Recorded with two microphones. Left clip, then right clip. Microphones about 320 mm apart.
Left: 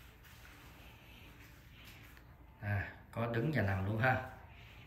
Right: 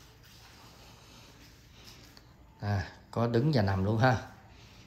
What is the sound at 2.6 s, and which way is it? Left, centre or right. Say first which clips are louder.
Speech: right 4 dB; centre.